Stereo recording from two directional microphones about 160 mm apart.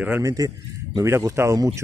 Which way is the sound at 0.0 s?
15° right (ahead or behind).